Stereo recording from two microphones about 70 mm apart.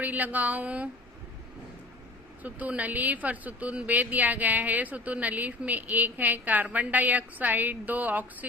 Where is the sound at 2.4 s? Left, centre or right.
Right.